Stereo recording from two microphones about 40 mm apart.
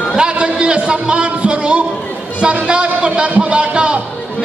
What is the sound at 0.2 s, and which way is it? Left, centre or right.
Music, right.